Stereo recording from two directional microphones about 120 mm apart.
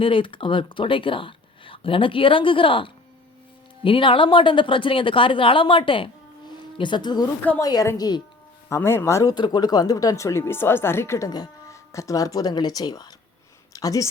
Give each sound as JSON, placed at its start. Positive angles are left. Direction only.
{"t": 0.0, "sound": "a woman's voice", "side_deg": 45}
{"t": 8.7, "sound": "speech", "side_deg": 20}
{"t": 9.3, "sound": "speech", "side_deg": 35}